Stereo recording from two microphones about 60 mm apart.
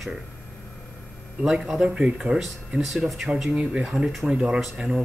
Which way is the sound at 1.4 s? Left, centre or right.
Centre.